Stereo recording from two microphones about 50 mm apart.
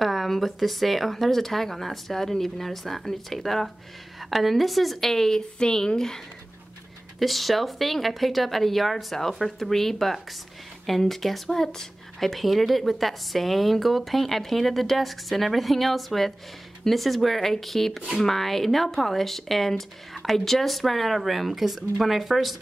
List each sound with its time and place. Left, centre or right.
0.0 s a woman's voice: centre